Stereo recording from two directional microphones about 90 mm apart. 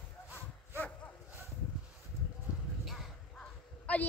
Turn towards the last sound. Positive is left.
turn(degrees=15)  # may be behind; listen again after turning